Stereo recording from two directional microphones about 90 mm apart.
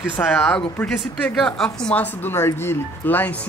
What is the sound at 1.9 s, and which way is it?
Speech, 20° left (ahead or behind).